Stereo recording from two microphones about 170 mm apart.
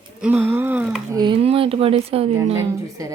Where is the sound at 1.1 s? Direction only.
25° right (ahead or behind).